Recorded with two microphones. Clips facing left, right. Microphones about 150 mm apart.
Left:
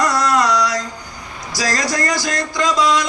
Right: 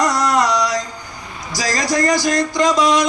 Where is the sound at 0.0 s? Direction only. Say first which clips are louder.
Even; 15° right (ahead or behind).